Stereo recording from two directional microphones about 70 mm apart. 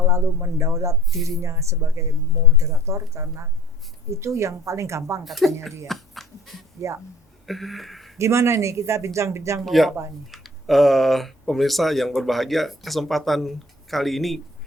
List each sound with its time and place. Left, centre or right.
0.0 s speech: right
5.2 s speech: centre
6.8 s speech: right
7.4 s speech: centre
8.2 s speech: right
9.6 s speech: centre